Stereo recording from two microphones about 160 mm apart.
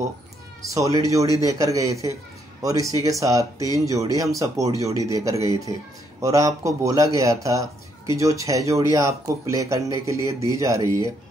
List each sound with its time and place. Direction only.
0.7 s speech: 20° right (ahead or behind)